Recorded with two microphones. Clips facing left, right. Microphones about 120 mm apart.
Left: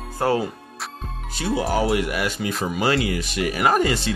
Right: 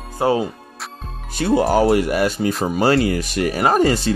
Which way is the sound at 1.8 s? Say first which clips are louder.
Right 6 dB; 40° right (ahead or behind).